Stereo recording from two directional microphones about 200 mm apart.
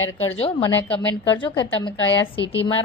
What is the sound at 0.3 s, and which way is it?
Speech, 30° left (ahead or behind).